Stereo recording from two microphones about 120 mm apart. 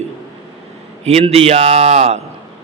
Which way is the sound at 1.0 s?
60° right (ahead or behind).